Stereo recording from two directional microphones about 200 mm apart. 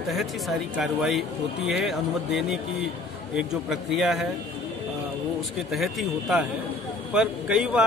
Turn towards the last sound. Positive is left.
turn(degrees=-5)  # may be behind; listen again after turning